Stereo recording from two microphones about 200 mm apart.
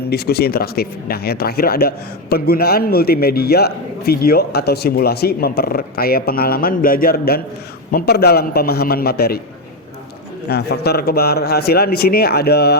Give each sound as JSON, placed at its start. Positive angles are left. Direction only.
{"t": 0.1, "sound": "a man's voice", "side_deg": 50}
{"t": 10.5, "sound": "a man's voice", "side_deg": 55}